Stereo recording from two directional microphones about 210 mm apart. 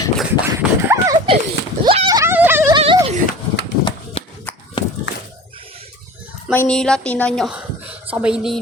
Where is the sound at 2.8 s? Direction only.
25° right (ahead or behind).